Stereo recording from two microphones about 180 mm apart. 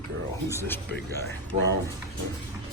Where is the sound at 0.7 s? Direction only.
10° left (ahead or behind).